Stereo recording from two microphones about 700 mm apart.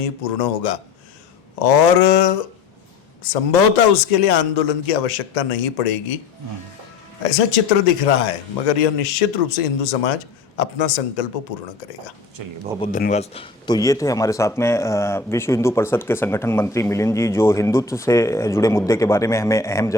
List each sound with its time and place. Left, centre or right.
0.0 s speech: left
7.2 s speech: left
12.4 s speech: right
12.8 s speech: centre